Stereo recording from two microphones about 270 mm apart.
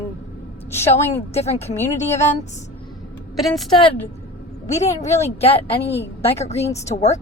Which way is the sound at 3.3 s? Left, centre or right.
Centre.